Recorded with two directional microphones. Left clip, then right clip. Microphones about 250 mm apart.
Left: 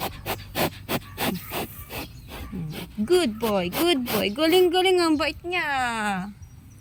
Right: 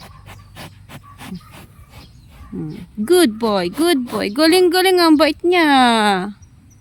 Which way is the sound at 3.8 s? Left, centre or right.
Right.